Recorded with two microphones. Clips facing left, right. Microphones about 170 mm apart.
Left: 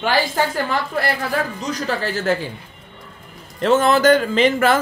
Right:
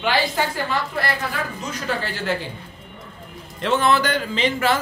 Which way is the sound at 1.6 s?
40° left (ahead or behind).